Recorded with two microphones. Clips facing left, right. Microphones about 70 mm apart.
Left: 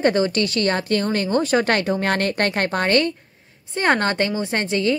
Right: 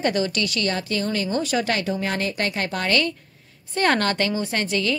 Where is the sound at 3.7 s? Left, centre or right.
Left.